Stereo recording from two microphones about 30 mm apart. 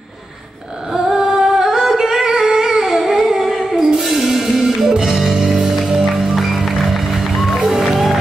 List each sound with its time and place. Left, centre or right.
0.9 s a sound: centre
1.6 s music: centre
2.4 s humming: centre
3.3 s music: centre